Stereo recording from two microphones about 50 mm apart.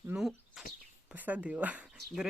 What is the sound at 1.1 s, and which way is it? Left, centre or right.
Speech, right.